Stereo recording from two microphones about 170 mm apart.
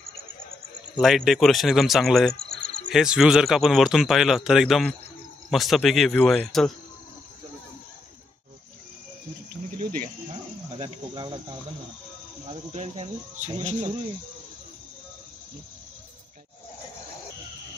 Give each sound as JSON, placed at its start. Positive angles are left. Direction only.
{"t": 0.9, "sound": "speech", "side_deg": 0}
{"t": 9.8, "sound": "insect", "side_deg": -50}
{"t": 10.8, "sound": "cricket", "side_deg": -30}
{"t": 12.4, "sound": "speech", "side_deg": -40}